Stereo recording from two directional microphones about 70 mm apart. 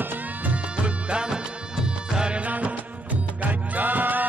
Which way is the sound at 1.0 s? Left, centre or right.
Centre.